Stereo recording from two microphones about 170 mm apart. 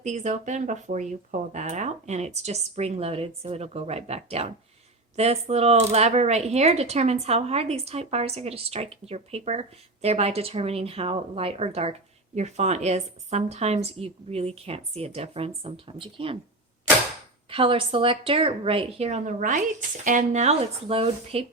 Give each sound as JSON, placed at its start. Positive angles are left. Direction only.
{"t": 0.0, "sound": "speech", "side_deg": -45}
{"t": 17.5, "sound": "speech", "side_deg": -30}